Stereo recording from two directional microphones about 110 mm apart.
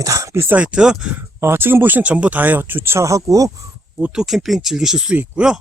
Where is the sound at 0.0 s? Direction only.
30° right (ahead or behind).